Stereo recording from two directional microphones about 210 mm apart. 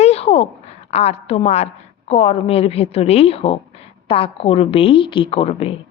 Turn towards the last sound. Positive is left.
turn(degrees=25)  # may be behind; listen again after turning